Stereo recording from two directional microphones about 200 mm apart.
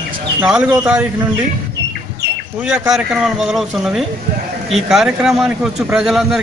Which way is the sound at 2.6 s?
5° right (ahead or behind).